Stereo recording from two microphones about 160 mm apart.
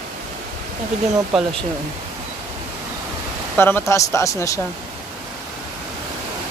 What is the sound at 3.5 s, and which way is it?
Speech, 15° left (ahead or behind).